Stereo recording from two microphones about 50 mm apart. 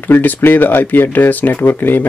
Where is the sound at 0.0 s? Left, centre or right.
Left.